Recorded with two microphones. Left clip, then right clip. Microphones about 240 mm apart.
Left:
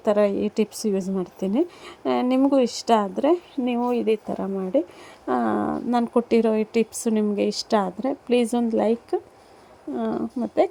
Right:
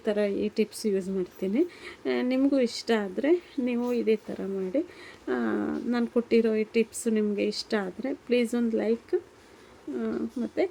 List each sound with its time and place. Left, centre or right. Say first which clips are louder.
0.0 s speech: left 7 dB; centre